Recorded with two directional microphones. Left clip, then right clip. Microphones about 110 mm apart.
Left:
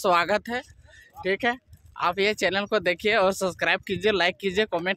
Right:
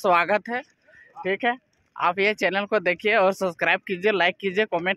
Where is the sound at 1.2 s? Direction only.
20° left (ahead or behind).